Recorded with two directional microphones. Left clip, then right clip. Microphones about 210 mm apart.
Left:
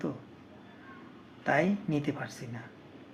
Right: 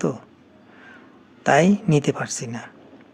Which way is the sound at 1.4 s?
50° right (ahead or behind).